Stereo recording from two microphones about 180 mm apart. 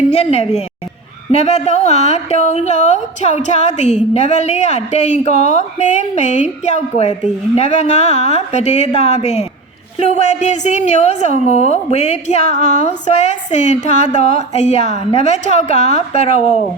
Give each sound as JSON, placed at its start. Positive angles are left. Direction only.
{"t": 0.1, "sound": "a woman's voice", "side_deg": 35}